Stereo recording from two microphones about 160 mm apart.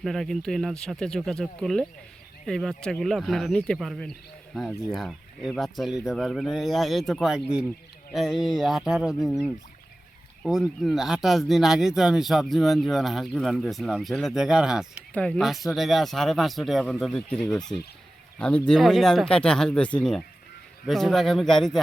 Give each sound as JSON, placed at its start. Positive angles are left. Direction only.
{"t": 0.0, "sound": "speech", "side_deg": 0}